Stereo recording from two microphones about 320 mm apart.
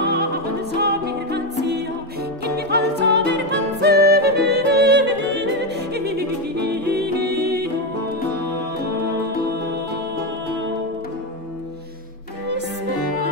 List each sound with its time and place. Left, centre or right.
0.0 s music: right